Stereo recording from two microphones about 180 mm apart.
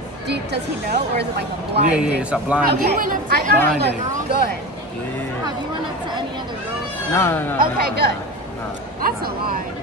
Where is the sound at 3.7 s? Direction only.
65° right (ahead or behind).